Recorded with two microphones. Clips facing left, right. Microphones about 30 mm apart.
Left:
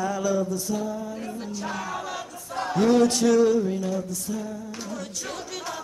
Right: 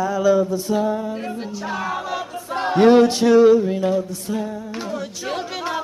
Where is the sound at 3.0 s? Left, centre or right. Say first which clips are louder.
Right 6 dB; right.